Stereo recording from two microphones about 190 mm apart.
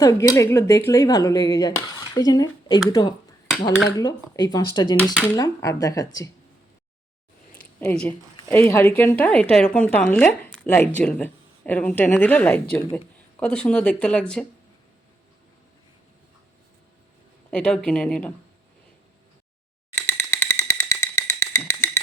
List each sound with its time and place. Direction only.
0.0 s speech: 15° left (ahead or behind)
7.8 s speech: 10° left (ahead or behind)
17.5 s speech: 5° left (ahead or behind)
20.1 s music: 10° left (ahead or behind)